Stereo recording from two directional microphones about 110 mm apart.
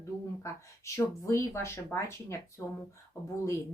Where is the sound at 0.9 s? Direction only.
25° left (ahead or behind).